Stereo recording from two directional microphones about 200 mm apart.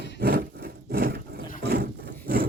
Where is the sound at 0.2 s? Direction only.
50° right (ahead or behind).